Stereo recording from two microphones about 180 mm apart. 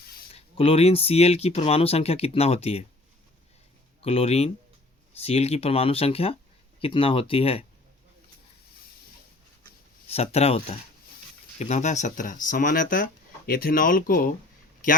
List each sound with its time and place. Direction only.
0.3 s speech: 30° left (ahead or behind)
4.0 s speech: 35° left (ahead or behind)
10.1 s speech: 35° left (ahead or behind); by 14.3 s 50° left (ahead or behind)